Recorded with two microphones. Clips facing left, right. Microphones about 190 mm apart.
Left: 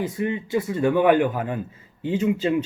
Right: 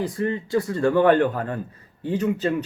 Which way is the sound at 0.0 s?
20° left (ahead or behind).